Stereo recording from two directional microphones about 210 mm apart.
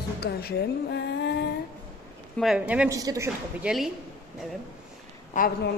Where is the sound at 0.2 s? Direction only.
50° left (ahead or behind).